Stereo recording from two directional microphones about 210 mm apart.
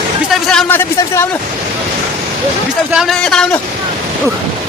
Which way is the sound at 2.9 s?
Centre (ahead or behind).